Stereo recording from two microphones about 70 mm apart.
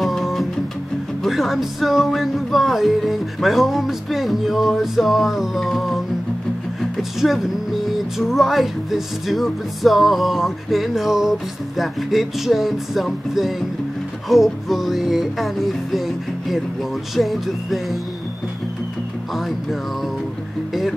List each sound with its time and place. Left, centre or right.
0.0 s music: centre
6.8 s speech: centre
8.2 s music: centre
17.1 s music: centre